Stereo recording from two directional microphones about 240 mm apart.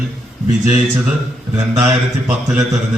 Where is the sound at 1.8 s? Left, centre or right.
Centre.